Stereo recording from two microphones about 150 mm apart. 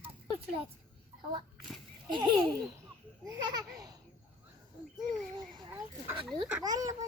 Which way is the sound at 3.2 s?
25° right (ahead or behind).